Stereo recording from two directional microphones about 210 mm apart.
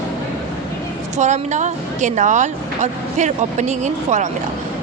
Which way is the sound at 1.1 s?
35° right (ahead or behind).